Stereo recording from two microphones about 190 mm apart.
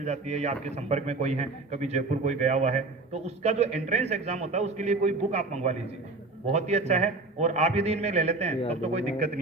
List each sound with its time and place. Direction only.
0.0 s a man's voice: 35° right (ahead or behind)